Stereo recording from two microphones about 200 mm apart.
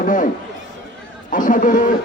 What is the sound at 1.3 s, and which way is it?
Speech, 40° left (ahead or behind).